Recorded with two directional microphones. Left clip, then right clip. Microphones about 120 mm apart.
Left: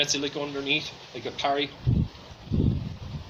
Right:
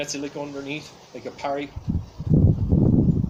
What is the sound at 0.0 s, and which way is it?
Speech, 25° right (ahead or behind).